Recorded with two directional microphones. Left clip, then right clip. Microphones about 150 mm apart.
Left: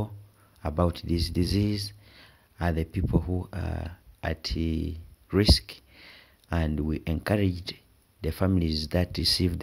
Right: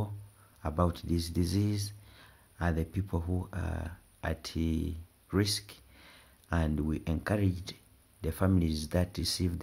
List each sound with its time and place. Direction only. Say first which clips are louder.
0.6 s speech: left 4 dB; 35° left (ahead or behind)